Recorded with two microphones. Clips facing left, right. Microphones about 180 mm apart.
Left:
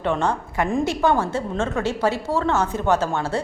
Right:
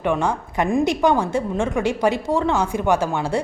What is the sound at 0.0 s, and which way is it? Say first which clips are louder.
A woman's voice: right 1 dB; 10° right (ahead or behind).